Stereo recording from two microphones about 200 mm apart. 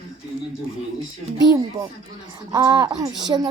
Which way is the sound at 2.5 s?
20° right (ahead or behind).